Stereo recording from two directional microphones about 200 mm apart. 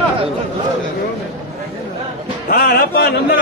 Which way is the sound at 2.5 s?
50° left (ahead or behind).